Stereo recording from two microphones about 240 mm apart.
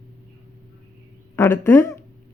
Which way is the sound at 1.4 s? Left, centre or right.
Centre.